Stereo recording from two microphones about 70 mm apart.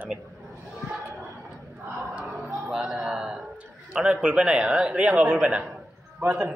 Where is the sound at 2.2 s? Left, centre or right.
Centre.